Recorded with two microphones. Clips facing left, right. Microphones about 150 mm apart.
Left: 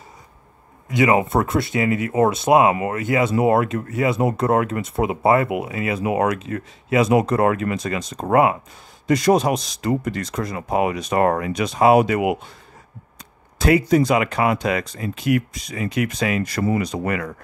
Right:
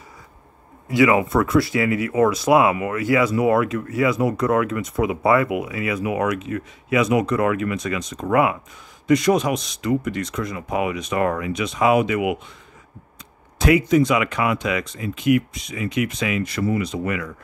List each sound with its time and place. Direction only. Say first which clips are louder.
0.9 s speech: right 1 dB; 25° left (ahead or behind)
2.7 s speech: left 1 dB; 40° left (ahead or behind)
3.0 s speech: right 2 dB; 25° left (ahead or behind); by 12.4 s 40° left (ahead or behind)
13.6 s speech: even; 35° left (ahead or behind)